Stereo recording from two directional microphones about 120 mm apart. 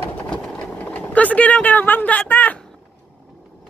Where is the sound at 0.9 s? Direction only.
10° left (ahead or behind).